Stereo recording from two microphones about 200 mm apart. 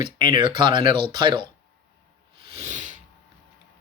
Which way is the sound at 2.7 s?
40° right (ahead or behind).